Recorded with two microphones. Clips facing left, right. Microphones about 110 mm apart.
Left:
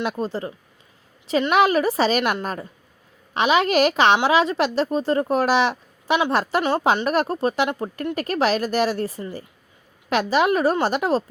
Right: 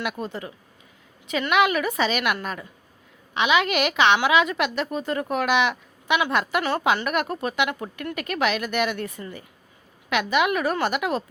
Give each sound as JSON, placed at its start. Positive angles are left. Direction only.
{"t": 0.0, "sound": "a woman's voice", "side_deg": 30}